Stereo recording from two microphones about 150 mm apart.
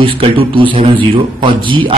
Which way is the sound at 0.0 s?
35° right (ahead or behind).